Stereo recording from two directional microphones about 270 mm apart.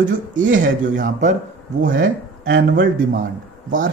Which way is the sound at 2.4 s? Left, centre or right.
Right.